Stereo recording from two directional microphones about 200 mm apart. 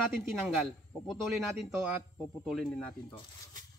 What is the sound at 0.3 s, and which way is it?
Speech, centre (ahead or behind).